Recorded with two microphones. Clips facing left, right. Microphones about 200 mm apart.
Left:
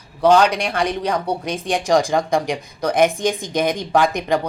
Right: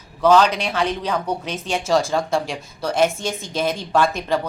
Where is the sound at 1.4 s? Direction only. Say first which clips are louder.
Left 3 dB; 15° left (ahead or behind).